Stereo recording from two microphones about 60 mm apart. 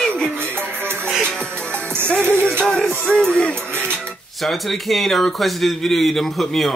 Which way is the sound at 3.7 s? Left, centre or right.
Right.